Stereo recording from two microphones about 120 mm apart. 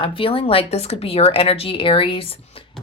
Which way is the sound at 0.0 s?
50° left (ahead or behind).